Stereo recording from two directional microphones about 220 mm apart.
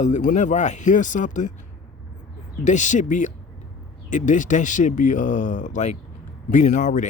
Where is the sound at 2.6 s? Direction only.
35° left (ahead or behind).